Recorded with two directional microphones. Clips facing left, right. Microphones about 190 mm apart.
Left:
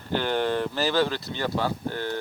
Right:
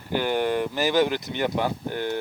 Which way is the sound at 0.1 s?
10° right (ahead or behind).